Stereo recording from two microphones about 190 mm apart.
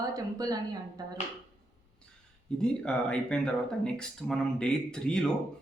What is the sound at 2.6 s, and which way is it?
Speech, 5° left (ahead or behind).